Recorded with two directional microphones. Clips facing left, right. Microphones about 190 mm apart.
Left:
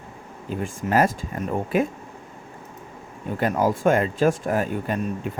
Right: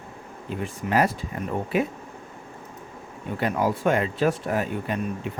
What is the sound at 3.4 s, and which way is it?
Speech, 45° left (ahead or behind).